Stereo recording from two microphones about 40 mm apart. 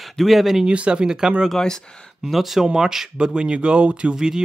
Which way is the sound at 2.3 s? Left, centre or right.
Centre.